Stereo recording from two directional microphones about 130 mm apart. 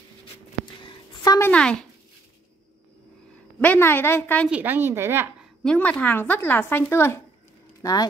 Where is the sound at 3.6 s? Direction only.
15° left (ahead or behind).